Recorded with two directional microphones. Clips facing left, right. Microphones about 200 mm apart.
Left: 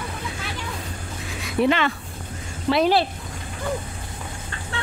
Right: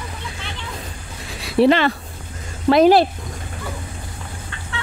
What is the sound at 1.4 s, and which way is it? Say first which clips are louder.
Speech: right 6 dB; 35° right (ahead or behind).